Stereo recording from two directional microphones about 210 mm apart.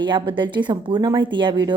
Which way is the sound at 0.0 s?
25° right (ahead or behind).